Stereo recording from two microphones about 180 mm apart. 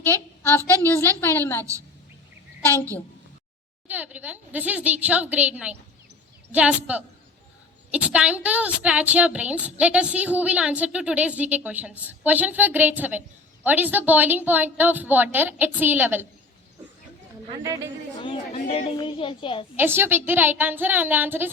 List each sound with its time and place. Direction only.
0.0 s a woman's voice: 10° left (ahead or behind)
3.8 s a woman's voice: 10° right (ahead or behind)
18.7 s a child's voice: 30° left (ahead or behind)
19.7 s a woman's voice: 10° right (ahead or behind)